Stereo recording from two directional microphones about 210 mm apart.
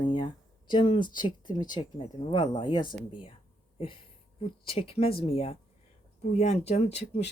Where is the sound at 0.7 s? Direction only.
20° left (ahead or behind).